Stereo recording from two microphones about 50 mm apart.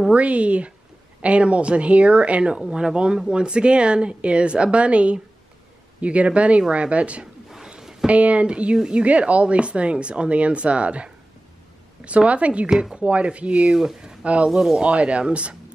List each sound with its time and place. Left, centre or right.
0.1 s speech: right
2.5 s speech: centre
7.4 s a sound: centre
8.1 s speech: right
9.0 s speech: right
13.7 s speech: centre
14.2 s speech: right
14.5 s speech: centre
14.8 s speech: right